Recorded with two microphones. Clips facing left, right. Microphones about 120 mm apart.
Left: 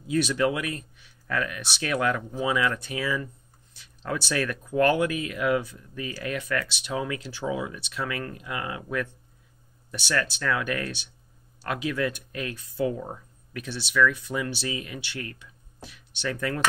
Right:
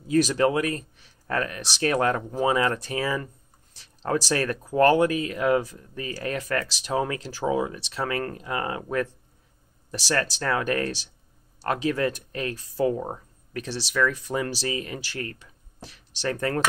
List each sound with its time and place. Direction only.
0.0 s speech: 40° right (ahead or behind)